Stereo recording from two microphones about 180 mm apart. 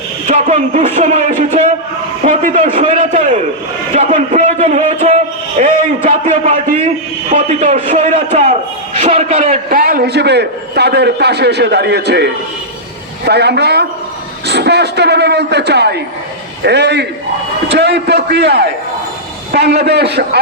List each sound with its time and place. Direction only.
0.3 s a man's voice: 40° right (ahead or behind); by 20.4 s 65° right (ahead or behind)